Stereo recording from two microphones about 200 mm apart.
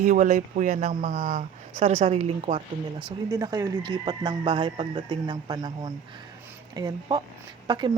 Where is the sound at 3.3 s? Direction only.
20° right (ahead or behind).